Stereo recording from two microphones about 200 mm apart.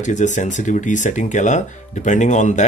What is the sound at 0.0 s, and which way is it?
Speech, 35° left (ahead or behind).